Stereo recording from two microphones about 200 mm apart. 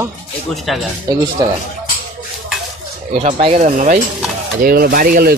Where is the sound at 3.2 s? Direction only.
30° right (ahead or behind); by 5.3 s 50° right (ahead or behind).